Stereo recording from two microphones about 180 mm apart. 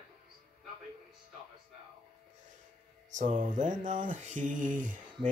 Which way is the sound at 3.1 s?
45° right (ahead or behind).